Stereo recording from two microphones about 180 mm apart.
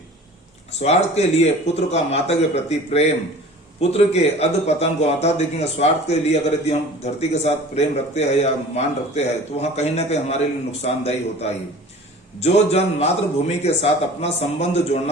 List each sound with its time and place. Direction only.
0.8 s a man's voice: 35° left (ahead or behind)